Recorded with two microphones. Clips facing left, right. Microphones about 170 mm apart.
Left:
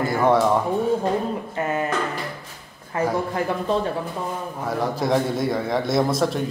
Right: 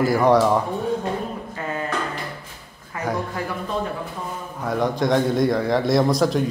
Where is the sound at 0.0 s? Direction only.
Centre (ahead or behind).